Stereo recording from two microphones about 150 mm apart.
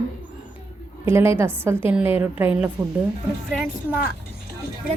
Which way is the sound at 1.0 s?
15° right (ahead or behind).